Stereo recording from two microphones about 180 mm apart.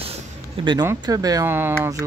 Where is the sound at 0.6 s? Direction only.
25° right (ahead or behind).